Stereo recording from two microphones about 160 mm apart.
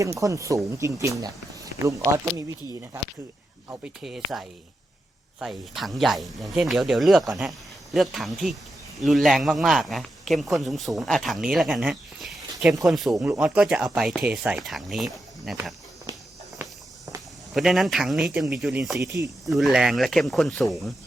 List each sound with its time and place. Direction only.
0.0 s speech: 20° right (ahead or behind)
3.7 s speech: 5° right (ahead or behind)
17.5 s speech: centre (ahead or behind)
18.9 s speech: 20° right (ahead or behind)
19.5 s speech: centre (ahead or behind)